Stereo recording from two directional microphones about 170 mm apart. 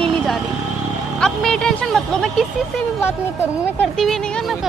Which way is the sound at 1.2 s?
5° left (ahead or behind).